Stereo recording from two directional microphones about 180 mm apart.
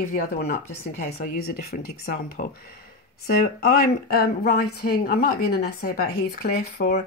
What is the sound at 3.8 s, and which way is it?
Speech, 60° left (ahead or behind).